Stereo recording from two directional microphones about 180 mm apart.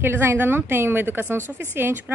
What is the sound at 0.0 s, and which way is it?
A woman's voice, 15° right (ahead or behind).